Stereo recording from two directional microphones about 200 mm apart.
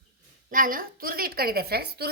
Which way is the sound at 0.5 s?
45° right (ahead or behind).